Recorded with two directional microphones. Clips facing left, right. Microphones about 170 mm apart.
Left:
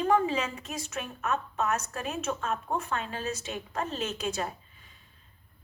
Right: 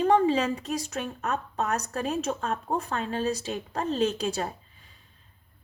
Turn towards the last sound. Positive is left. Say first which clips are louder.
# right 5 dB
turn(degrees=-35)  # may be behind; listen again after turning